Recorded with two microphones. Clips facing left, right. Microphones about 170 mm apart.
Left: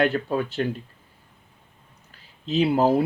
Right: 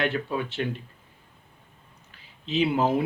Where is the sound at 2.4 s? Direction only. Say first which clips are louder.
Left 4 dB; 40° left (ahead or behind).